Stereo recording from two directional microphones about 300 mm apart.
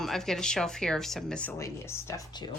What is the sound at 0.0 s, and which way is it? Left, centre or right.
A woman's voice, centre.